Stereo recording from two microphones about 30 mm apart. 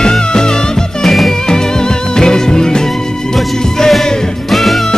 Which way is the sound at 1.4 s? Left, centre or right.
Left.